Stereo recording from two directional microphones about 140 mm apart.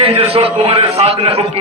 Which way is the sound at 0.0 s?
40° right (ahead or behind).